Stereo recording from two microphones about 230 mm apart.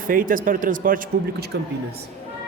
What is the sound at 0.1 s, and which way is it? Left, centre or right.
Speech, right.